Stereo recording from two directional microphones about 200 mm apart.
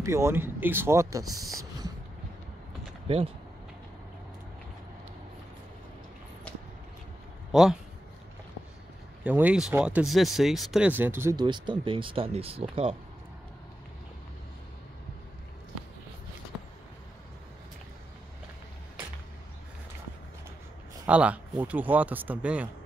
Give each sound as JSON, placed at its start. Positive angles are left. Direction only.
{"t": 0.0, "sound": "speech", "side_deg": -15}
{"t": 3.1, "sound": "speech", "side_deg": -30}
{"t": 9.2, "sound": "speech", "side_deg": -5}
{"t": 21.0, "sound": "speech", "side_deg": -5}